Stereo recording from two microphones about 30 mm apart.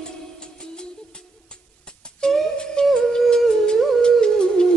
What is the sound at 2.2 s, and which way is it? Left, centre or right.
Flute, left.